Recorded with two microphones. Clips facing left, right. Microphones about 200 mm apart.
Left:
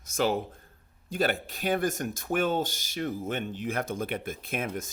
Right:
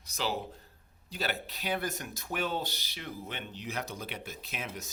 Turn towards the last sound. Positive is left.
turn(degrees=50)  # may be behind; listen again after turning